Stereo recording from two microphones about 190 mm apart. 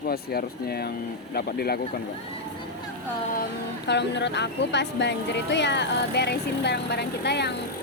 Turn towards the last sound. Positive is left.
turn(degrees=60)  # may be behind; listen again after turning